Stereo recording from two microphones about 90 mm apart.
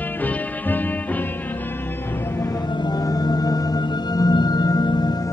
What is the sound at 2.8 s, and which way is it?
Music, 45° left (ahead or behind).